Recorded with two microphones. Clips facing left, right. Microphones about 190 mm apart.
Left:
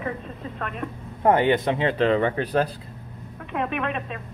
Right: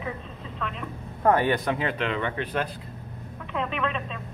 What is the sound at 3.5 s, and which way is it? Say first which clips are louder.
Speech: left 2 dB; 55° left (ahead or behind).